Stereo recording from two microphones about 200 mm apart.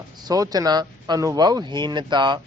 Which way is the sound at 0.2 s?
20° right (ahead or behind).